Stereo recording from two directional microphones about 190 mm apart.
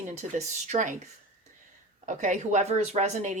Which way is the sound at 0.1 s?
35° right (ahead or behind).